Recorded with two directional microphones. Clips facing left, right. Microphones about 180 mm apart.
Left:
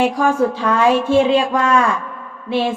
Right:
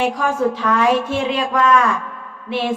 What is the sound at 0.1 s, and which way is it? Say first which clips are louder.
A woman's voice: left 3 dB; 30° left (ahead or behind).